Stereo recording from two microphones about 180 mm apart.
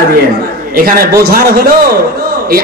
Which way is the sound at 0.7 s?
50° right (ahead or behind).